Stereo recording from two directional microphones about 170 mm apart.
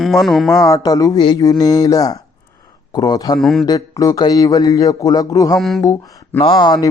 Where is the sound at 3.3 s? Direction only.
Centre (ahead or behind).